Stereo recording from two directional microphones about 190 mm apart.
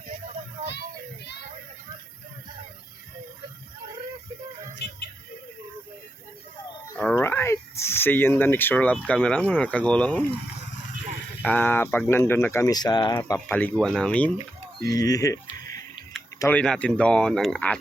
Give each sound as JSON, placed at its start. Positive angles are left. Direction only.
{"t": 6.9, "sound": "speech", "side_deg": 5}
{"t": 11.4, "sound": "speech", "side_deg": 10}
{"t": 14.8, "sound": "tick-tock", "side_deg": 20}
{"t": 16.4, "sound": "speech", "side_deg": 10}